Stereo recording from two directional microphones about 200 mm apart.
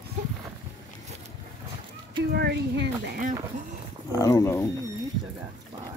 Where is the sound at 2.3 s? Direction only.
55° right (ahead or behind).